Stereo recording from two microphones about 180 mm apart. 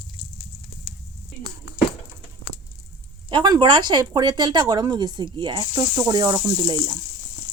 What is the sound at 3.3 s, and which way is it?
Speech, 25° right (ahead or behind).